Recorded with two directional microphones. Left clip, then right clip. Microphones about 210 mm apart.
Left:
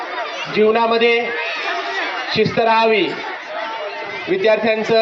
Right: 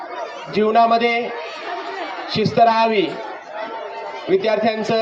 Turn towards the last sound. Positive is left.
turn(degrees=-70)  # may be behind; listen again after turning